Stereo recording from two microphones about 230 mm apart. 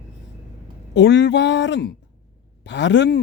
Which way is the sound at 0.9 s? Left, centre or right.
Left.